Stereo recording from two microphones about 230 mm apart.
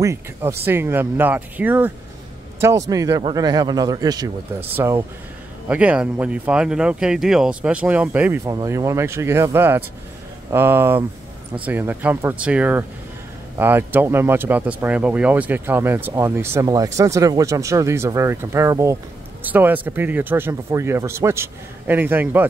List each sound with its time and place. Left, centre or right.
0.0 s speech: centre